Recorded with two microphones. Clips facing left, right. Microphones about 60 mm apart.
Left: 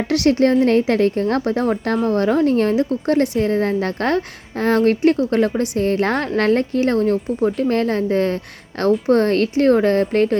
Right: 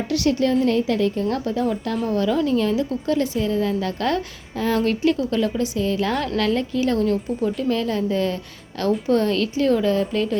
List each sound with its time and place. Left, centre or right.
0.1 s a woman's voice: left